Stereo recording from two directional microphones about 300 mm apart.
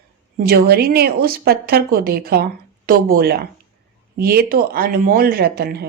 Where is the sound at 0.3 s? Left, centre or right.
Right.